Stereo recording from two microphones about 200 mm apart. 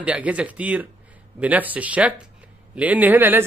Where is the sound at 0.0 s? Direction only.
5° right (ahead or behind).